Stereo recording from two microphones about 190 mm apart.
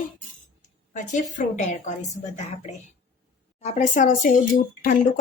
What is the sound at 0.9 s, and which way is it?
A woman's voice, 40° left (ahead or behind).